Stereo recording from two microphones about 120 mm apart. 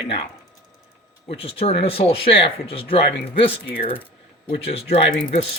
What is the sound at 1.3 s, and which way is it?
Speech, 55° left (ahead or behind).